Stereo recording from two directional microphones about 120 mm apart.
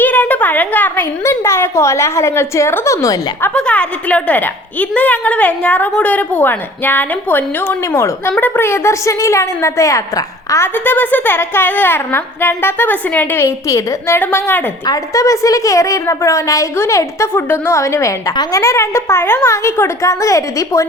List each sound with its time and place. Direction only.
0.0 s a woman's voice: 15° left (ahead or behind)
3.5 s a woman's voice: 10° left (ahead or behind)
14.8 s a woman's voice: 30° left (ahead or behind)